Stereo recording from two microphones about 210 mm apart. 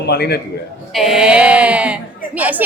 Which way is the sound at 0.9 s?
Centre (ahead or behind).